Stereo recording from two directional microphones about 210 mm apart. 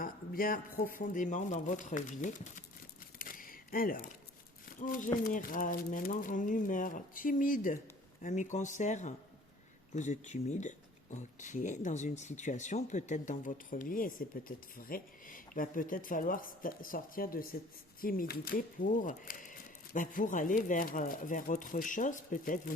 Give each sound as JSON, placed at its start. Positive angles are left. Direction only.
{"t": 0.0, "sound": "speech", "side_deg": 40}
{"t": 3.2, "sound": "a sound", "side_deg": 40}
{"t": 4.8, "sound": "speech", "side_deg": 40}